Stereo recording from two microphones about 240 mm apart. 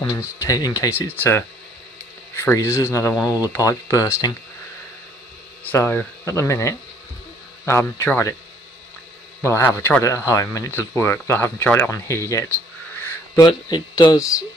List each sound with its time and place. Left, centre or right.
0.4 s speech: centre
5.6 s speech: centre
9.4 s speech: centre
12.9 s a sound: centre
13.5 s speech: centre